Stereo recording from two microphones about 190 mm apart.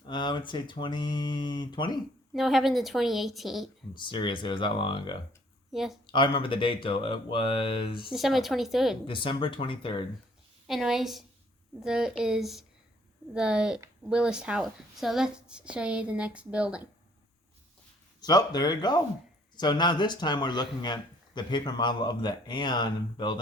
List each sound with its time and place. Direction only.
0.0 s speech: 25° left (ahead or behind)
2.3 s a woman's voice: centre (ahead or behind)
3.9 s speech: 25° left (ahead or behind)
5.7 s a woman's voice: centre (ahead or behind)
6.1 s speech: 25° left (ahead or behind)
8.1 s a woman's voice: centre (ahead or behind)
9.0 s speech: 25° left (ahead or behind)
10.7 s a woman's voice: centre (ahead or behind)
18.2 s speech: 20° left (ahead or behind)